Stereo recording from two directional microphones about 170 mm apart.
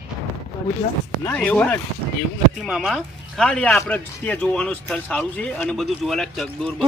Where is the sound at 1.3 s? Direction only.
10° left (ahead or behind).